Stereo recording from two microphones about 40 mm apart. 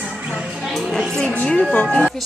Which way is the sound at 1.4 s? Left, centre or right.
Left.